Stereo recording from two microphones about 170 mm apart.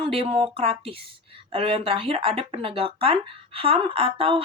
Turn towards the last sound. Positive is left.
turn(degrees=-35)  # may be behind; listen again after turning